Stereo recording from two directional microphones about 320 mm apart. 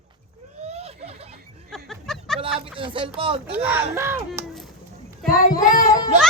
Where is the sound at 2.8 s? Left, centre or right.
Centre.